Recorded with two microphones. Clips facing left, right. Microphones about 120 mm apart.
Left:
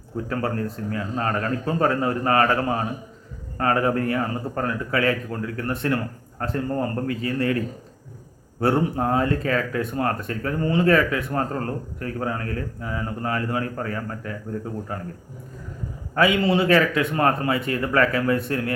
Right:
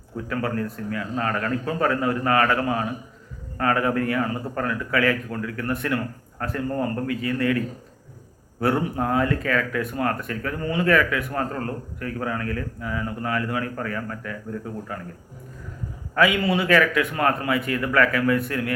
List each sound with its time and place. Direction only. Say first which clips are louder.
0.3 s speech: even; 35° left (ahead or behind)
8.6 s speech: left 2 dB; 30° left (ahead or behind)
16.1 s a man's voice: left 1 dB; 30° left (ahead or behind)